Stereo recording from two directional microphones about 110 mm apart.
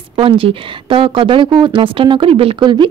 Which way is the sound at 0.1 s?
55° right (ahead or behind).